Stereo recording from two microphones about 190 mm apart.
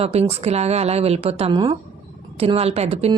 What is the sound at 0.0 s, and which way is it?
Speech, 30° right (ahead or behind).